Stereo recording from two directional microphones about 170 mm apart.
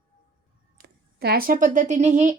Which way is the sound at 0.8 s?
65° right (ahead or behind).